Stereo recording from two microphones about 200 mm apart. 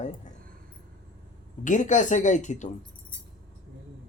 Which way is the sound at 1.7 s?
40° left (ahead or behind).